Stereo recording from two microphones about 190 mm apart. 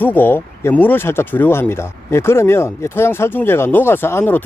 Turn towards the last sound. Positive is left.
turn(degrees=10)  # may be behind; listen again after turning